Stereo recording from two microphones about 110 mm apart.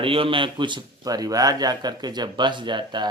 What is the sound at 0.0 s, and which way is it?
A man's voice, 55° right (ahead or behind).